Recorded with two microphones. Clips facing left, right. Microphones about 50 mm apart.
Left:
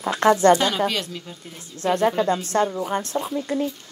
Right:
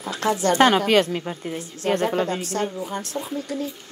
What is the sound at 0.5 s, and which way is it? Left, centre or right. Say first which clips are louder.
A woman's voice: right 6 dB; right.